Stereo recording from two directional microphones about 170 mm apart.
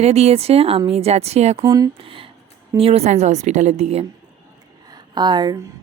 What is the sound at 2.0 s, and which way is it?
Speech, 30° right (ahead or behind).